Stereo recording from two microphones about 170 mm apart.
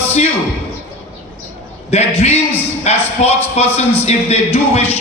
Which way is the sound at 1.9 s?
35° left (ahead or behind).